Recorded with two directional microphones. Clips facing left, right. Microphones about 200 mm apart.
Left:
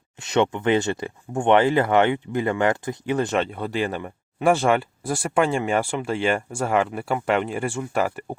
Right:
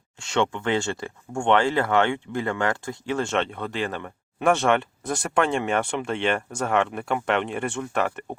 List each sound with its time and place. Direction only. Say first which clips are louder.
0.2 s speech: left 3 dB; 20° left (ahead or behind)
3.3 s speech: left 2 dB; 5° left (ahead or behind)